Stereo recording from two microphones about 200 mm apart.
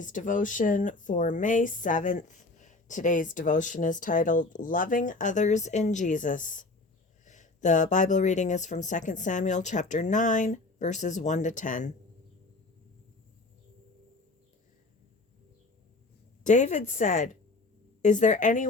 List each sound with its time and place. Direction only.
0.0 s speech: 40° left (ahead or behind)
16.4 s speech: 35° left (ahead or behind)